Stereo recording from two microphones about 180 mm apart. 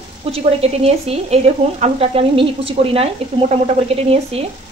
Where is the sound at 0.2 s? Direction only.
35° right (ahead or behind).